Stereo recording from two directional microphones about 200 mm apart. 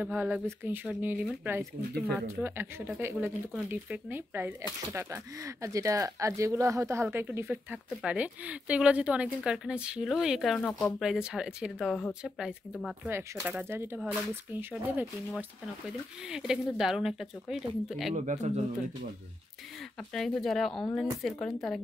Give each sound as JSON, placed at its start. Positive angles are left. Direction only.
{"t": 0.0, "sound": "speech", "side_deg": -10}
{"t": 18.1, "sound": "speech", "side_deg": -35}
{"t": 20.2, "sound": "speech", "side_deg": 0}